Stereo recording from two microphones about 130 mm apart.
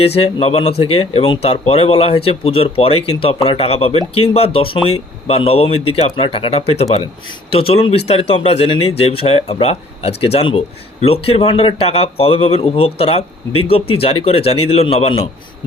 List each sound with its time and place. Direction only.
0.0 s speech: 50° left (ahead or behind)